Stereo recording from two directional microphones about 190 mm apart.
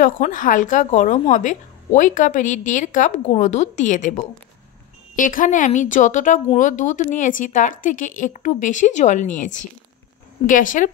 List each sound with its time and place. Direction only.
0.0 s a woman's voice: 45° left (ahead or behind)